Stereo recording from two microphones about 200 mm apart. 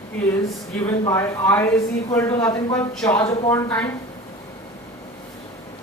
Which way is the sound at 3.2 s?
25° left (ahead or behind).